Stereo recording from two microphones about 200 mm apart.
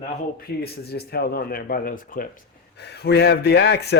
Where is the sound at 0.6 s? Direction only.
50° left (ahead or behind).